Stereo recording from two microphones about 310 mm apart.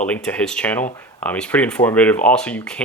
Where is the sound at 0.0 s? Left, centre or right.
Centre.